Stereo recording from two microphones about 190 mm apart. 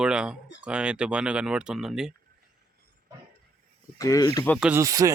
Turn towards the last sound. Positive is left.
turn(degrees=-15)  # may be behind; listen again after turning